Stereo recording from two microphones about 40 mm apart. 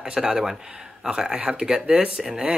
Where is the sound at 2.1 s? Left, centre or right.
Centre.